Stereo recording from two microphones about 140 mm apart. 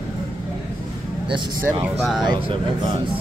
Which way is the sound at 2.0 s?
Centre (ahead or behind).